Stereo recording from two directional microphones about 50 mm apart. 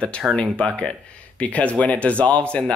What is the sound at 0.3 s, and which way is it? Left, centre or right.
Speech, centre.